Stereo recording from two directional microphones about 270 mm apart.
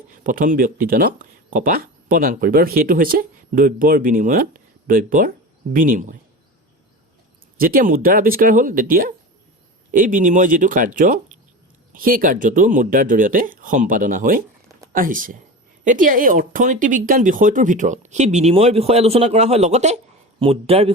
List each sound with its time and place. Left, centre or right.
0.1 s speech: right
7.6 s speech: right